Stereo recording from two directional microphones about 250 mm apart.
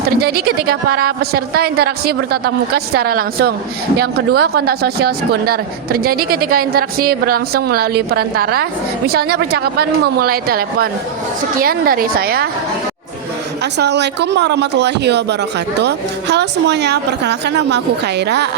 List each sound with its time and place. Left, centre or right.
0.2 s speech: right
13.7 s speech: right